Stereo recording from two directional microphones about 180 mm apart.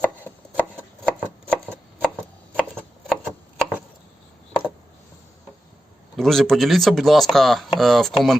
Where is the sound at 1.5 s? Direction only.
10° right (ahead or behind).